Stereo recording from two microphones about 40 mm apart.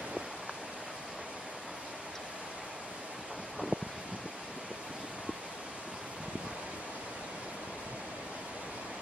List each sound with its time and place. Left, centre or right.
3.7 s wind: right